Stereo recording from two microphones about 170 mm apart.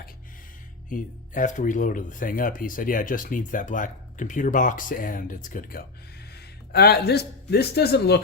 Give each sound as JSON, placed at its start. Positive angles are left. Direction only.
{"t": 0.9, "sound": "speech", "side_deg": 50}
{"t": 6.7, "sound": "a man's voice", "side_deg": 70}